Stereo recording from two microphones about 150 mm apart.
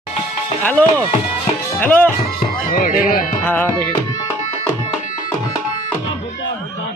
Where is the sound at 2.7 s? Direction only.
70° left (ahead or behind).